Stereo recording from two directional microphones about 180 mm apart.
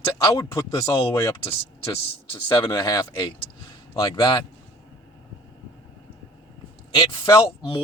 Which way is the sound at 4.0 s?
25° left (ahead or behind).